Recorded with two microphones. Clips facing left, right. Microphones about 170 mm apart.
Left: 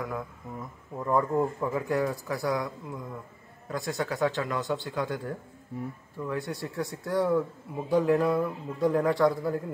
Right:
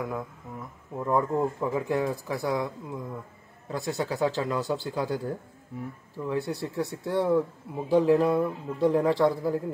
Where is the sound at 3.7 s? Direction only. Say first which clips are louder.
Right 1 dB; 30° right (ahead or behind).